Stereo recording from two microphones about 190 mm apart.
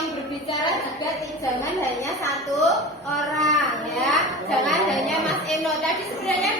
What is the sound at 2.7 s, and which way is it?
A child's voice, centre (ahead or behind).